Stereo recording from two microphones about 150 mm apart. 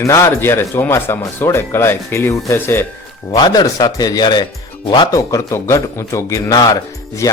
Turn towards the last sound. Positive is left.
turn(degrees=25)  # may be behind; listen again after turning